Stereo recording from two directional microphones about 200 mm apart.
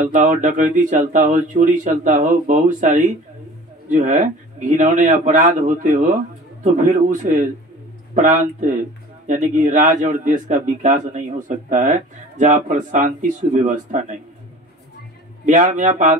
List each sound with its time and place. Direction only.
0.0 s speech: 40° right (ahead or behind)
15.4 s speech: 40° right (ahead or behind)